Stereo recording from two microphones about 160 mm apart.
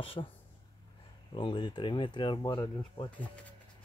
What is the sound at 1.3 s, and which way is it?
Speech, 30° left (ahead or behind).